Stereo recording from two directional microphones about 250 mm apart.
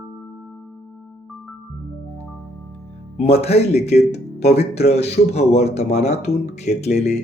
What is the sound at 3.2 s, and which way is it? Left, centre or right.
Speech, left.